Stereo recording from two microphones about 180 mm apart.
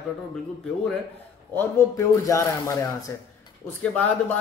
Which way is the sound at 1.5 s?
15° left (ahead or behind).